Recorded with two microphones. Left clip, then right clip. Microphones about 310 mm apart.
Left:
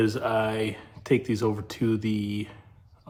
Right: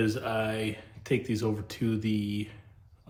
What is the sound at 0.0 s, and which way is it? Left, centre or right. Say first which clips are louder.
Speech: left 5 dB; left.